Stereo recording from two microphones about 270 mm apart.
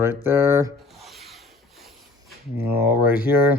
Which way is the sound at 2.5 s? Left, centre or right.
Centre.